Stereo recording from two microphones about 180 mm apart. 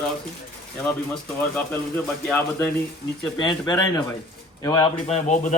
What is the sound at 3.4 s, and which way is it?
Speech, 25° left (ahead or behind).